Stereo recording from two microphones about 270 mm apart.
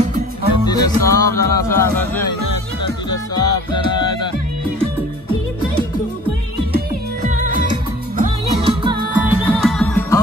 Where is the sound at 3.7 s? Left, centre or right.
Centre.